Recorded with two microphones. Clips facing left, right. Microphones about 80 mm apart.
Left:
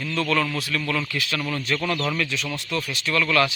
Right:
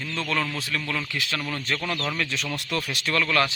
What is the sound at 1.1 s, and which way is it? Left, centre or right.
Speech, right.